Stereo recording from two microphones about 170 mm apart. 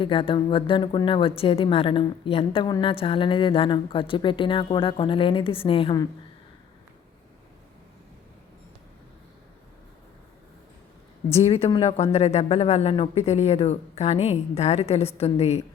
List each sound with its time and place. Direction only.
0.0 s speech: 30° left (ahead or behind)
11.3 s speech: 35° left (ahead or behind)